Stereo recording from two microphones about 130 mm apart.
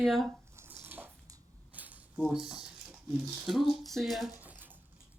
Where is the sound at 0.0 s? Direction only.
Centre (ahead or behind).